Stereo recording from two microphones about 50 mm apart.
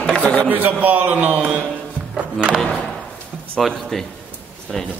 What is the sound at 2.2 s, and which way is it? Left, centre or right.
Music, right.